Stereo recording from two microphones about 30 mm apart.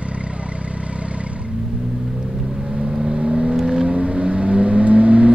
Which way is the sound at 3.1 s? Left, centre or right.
Right.